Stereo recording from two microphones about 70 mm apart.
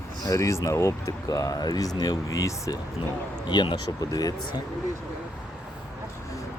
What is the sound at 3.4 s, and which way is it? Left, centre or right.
Speech, left.